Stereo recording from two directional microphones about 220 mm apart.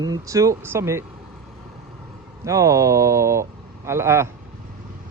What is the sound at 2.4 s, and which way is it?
A man's voice, 15° right (ahead or behind).